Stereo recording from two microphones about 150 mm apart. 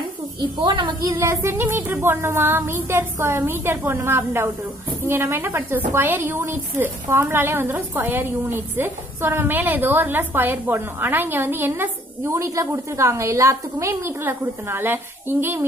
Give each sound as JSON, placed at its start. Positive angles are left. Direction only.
{"t": 0.4, "sound": "speech", "side_deg": -30}
{"t": 1.1, "sound": "a woman's voice", "side_deg": -20}